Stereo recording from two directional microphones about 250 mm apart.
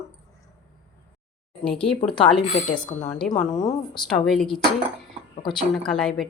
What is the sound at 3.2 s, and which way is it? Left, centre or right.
Speech, centre.